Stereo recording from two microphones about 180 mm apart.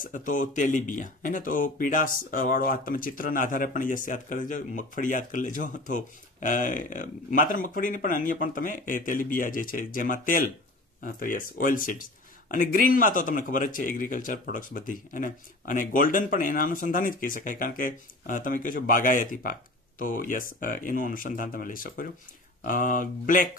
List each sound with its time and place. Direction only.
0.0 s speech: 45° left (ahead or behind)